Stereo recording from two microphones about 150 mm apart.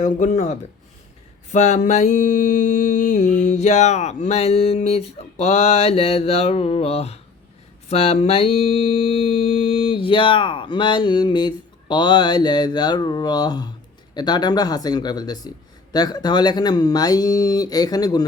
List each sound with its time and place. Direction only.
0.0 s speech: 60° left (ahead or behind)
1.5 s mantra: 50° left (ahead or behind); by 13.7 s 25° left (ahead or behind)
14.1 s speech: 30° left (ahead or behind)